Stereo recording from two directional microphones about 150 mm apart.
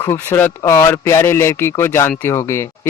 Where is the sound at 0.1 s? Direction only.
15° left (ahead or behind).